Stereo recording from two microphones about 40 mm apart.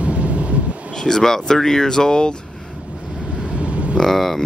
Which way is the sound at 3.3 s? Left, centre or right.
Right.